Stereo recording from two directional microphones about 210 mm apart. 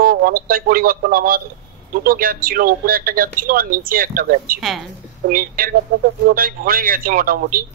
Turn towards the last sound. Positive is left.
turn(degrees=-45)  # may be behind; listen again after turning